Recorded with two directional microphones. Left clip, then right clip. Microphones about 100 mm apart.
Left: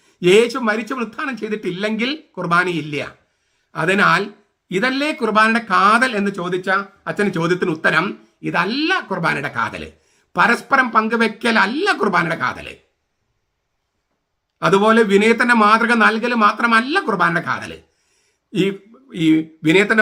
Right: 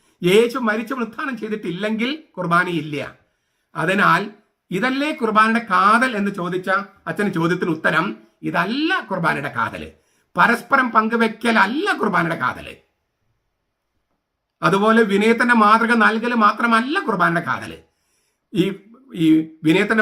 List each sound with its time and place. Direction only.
0.0 s speech: 25° left (ahead or behind)
14.6 s a man's voice: 20° left (ahead or behind)